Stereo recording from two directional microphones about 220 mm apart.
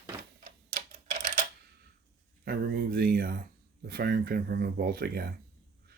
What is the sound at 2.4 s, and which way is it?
Speech, 45° right (ahead or behind).